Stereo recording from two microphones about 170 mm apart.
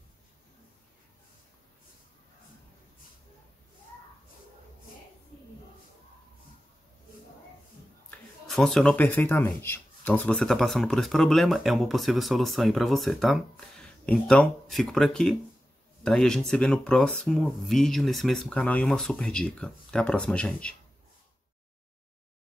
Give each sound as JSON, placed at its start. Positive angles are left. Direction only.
{"t": 8.5, "sound": "speech", "side_deg": 0}